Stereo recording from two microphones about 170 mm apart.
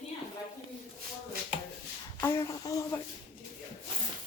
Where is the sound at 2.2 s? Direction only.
15° left (ahead or behind).